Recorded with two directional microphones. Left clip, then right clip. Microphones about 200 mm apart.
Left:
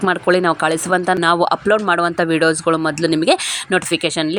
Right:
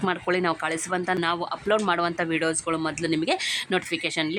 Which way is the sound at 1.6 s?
20° left (ahead or behind).